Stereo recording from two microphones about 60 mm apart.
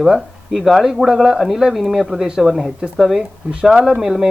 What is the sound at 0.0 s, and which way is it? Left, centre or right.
Speech, centre.